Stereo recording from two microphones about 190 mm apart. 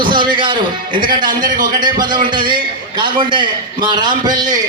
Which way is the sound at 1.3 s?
45° right (ahead or behind).